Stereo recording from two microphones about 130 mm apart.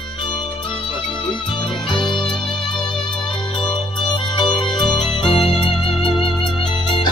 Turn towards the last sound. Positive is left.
turn(degrees=35)  # may be behind; listen again after turning